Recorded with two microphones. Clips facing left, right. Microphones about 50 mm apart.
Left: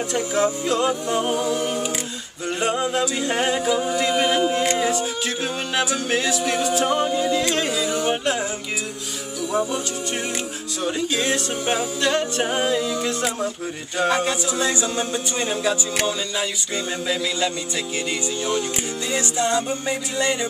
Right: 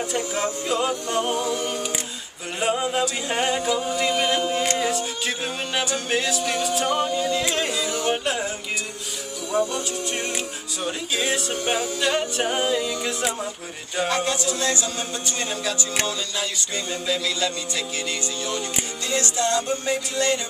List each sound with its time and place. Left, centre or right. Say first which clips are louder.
0.1 s a capella: left 4 dB; centre
9.5 s speech: even; centre
10.8 s a capella: left 3 dB; centre
13.9 s speech: left 2 dB; centre
19.0 s speech: left 1 dB; centre